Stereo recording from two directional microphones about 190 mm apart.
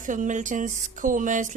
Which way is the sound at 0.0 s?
45° right (ahead or behind).